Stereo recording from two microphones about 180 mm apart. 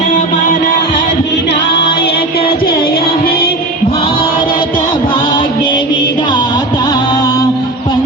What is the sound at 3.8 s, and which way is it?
Mantra, 30° left (ahead or behind).